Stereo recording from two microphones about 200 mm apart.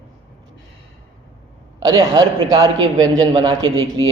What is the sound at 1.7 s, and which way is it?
A woman's voice, 20° right (ahead or behind).